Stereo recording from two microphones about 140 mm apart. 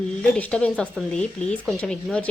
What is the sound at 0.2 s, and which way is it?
A woman's voice, 10° left (ahead or behind).